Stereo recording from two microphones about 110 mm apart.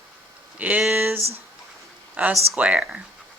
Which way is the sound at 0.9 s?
20° right (ahead or behind).